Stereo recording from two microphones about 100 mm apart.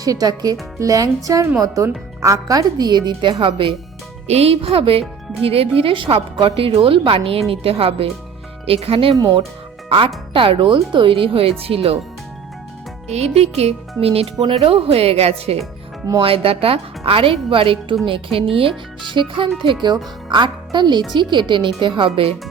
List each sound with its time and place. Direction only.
0.0 s a woman's voice: 40° right (ahead or behind); by 3.8 s 55° right (ahead or behind)
4.3 s speech: 85° right; by 9.1 s 70° right (ahead or behind)
9.1 s a woman's voice: 40° right (ahead or behind)
10.3 s speech: 60° right (ahead or behind)
13.1 s speech: 90° right
16.2 s speech: 70° right (ahead or behind)
19.0 s speech: 55° right (ahead or behind)